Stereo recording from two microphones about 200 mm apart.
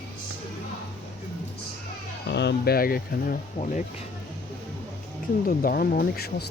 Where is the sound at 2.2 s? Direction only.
60° left (ahead or behind); by 3.9 s 40° left (ahead or behind).